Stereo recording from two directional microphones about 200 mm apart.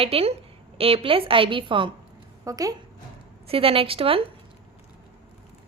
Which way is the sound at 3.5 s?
30° right (ahead or behind).